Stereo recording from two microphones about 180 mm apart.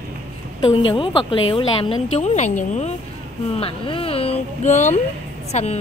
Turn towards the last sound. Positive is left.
turn(degrees=35)  # may be behind; listen again after turning